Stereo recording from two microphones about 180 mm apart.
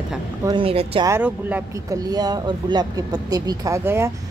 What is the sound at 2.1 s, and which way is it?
Speech, 20° right (ahead or behind).